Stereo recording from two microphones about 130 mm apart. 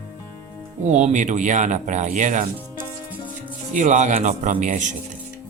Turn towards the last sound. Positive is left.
turn(degrees=-70)  # may be behind; listen again after turning